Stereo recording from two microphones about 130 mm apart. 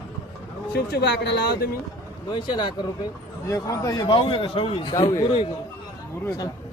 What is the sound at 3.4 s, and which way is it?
A man's voice, 25° left (ahead or behind).